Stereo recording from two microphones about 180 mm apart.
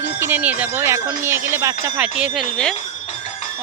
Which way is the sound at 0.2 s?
10° right (ahead or behind).